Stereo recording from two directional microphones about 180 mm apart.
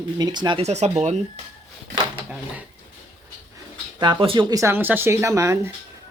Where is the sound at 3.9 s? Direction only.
30° right (ahead or behind).